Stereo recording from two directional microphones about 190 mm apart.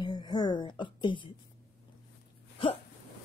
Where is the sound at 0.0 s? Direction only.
25° left (ahead or behind).